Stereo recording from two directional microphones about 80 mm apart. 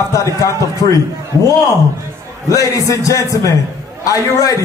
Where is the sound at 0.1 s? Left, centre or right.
Left.